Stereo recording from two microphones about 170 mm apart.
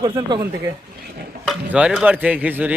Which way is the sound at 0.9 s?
65° right (ahead or behind).